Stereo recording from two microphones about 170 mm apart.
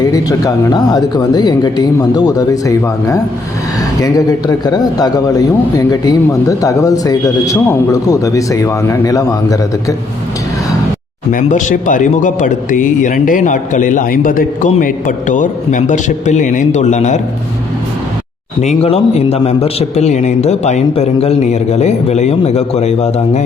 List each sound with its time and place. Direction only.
0.1 s a man's voice: 20° left (ahead or behind)
11.3 s speech: 50° left (ahead or behind)
18.6 s a man's voice: 40° left (ahead or behind)